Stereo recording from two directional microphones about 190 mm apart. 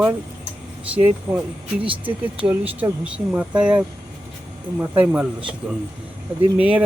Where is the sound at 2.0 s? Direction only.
5° right (ahead or behind).